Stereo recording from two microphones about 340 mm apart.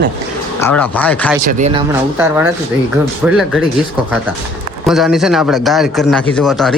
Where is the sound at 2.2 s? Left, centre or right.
Centre.